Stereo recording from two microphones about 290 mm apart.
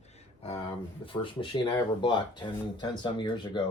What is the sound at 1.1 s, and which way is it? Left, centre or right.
Speech, centre.